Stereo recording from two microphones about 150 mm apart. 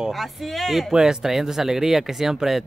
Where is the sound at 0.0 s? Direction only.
Centre (ahead or behind).